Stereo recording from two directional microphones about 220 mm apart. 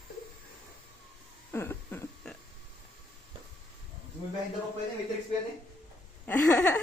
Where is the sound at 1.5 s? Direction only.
10° left (ahead or behind).